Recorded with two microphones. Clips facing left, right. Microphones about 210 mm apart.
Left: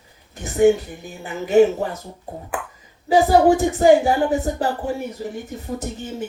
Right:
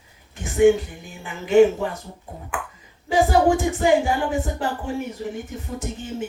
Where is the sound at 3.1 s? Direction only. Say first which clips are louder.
Left 3 dB; 40° left (ahead or behind).